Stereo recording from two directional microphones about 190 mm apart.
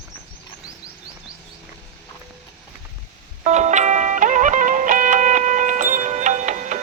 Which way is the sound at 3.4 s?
40° right (ahead or behind).